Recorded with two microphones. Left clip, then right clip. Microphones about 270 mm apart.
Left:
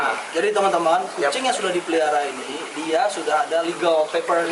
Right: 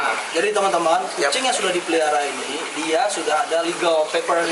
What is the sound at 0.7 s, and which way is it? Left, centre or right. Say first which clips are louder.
Speech: even; left.